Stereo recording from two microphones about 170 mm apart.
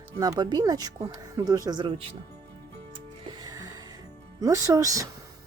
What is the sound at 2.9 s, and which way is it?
Music, 25° right (ahead or behind).